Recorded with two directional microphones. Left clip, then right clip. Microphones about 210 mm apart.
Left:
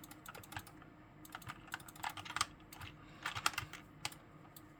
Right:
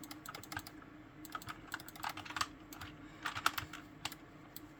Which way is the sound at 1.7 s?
30° left (ahead or behind).